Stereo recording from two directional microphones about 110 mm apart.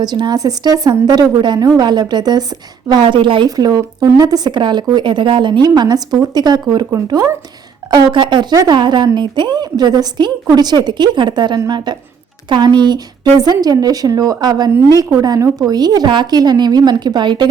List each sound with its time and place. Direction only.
0.0 s a woman's voice: 40° right (ahead or behind)
3.5 s speech: 35° right (ahead or behind)
6.9 s speech: 30° right (ahead or behind)
7.9 s a woman's voice: 40° right (ahead or behind)